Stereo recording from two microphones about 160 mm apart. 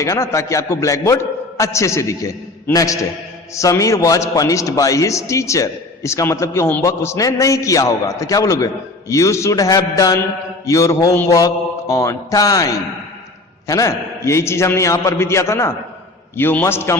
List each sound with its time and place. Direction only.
0.0 s a man's voice: 20° left (ahead or behind)